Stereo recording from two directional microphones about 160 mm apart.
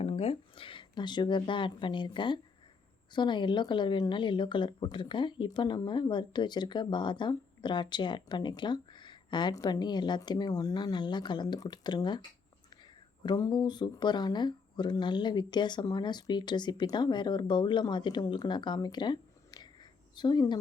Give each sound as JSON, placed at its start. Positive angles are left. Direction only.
{"t": 0.0, "sound": "speech", "side_deg": 40}
{"t": 13.2, "sound": "speech", "side_deg": 25}